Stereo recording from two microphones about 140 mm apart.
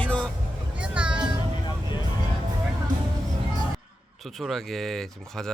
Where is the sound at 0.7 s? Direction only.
10° right (ahead or behind).